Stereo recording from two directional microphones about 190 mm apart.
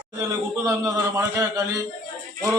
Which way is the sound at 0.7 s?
15° right (ahead or behind).